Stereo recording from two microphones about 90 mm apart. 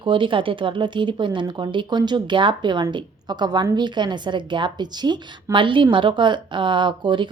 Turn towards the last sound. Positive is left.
turn(degrees=-65)  # may be behind; listen again after turning